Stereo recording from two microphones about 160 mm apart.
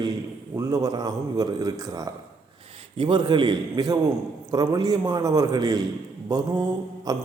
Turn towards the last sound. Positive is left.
turn(degrees=-25)  # may be behind; listen again after turning